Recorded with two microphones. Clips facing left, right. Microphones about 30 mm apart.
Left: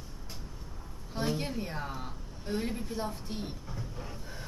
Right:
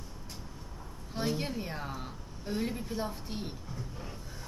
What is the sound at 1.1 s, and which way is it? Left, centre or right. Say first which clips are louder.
A woman's voice: even; centre.